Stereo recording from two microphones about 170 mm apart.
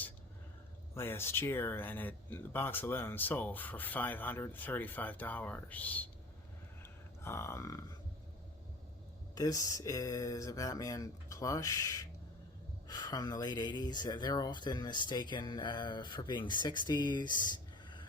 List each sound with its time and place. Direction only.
0.9 s speech: 15° left (ahead or behind)
7.2 s speech: 15° left (ahead or behind)
9.3 s speech: 20° left (ahead or behind)